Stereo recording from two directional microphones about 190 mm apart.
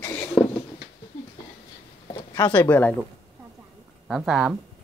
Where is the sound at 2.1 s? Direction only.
25° left (ahead or behind).